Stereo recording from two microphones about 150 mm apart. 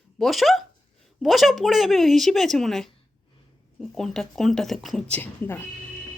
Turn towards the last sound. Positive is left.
turn(degrees=15)  # may be behind; listen again after turning